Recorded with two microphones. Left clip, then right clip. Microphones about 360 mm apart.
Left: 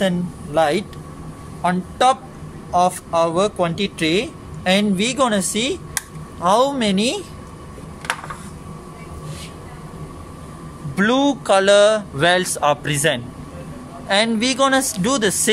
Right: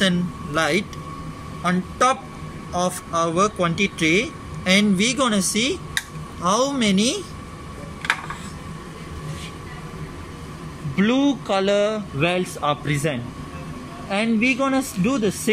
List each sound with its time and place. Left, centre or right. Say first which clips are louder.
0.6 s a man's voice: left 4 dB; left
11.0 s a man's voice: left 3 dB; left